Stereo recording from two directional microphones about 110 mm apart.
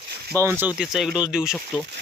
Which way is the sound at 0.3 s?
25° right (ahead or behind).